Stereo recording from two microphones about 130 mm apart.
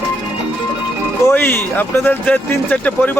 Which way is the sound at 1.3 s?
15° left (ahead or behind).